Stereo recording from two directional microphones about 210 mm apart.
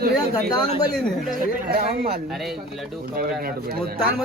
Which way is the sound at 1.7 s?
45° right (ahead or behind).